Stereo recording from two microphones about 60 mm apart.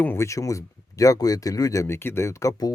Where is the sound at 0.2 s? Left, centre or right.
Left.